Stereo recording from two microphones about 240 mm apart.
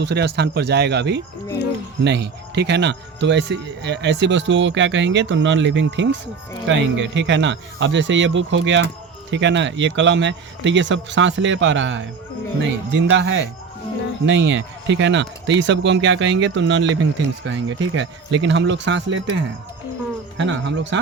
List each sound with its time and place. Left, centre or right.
0.0 s speech: right
20.4 s speech: right